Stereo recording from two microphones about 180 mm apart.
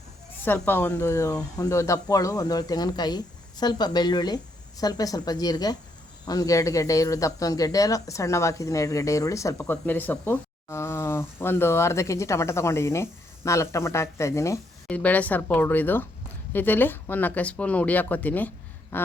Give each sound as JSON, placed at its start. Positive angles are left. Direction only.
{"t": 0.4, "sound": "speech", "side_deg": 10}